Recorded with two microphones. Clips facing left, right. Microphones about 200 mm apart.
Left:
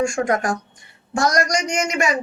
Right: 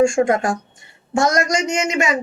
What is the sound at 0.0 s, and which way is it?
A man's voice, 25° right (ahead or behind).